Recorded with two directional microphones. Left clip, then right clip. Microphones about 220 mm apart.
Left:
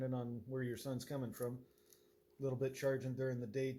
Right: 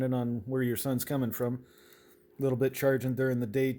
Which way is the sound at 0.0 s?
55° right (ahead or behind).